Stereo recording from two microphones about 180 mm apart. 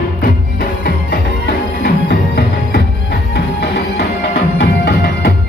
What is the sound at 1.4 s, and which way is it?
Music, 65° left (ahead or behind).